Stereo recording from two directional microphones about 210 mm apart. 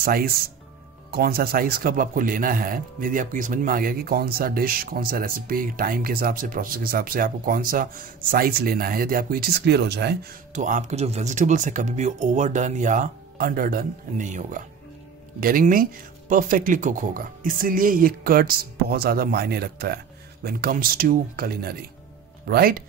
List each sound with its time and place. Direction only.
0.0 s speech: 45° right (ahead or behind)
10.5 s speech: 35° right (ahead or behind)